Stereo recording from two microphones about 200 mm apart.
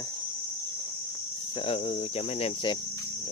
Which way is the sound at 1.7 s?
30° left (ahead or behind).